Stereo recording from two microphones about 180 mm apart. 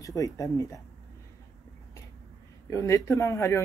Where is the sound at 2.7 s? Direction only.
15° left (ahead or behind).